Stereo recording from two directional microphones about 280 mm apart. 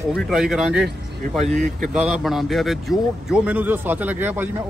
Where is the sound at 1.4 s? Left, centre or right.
Right.